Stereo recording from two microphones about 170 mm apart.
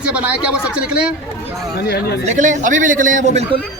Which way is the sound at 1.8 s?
70° left (ahead or behind).